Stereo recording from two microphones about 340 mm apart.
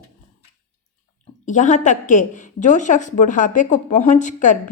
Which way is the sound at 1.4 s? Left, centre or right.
Left.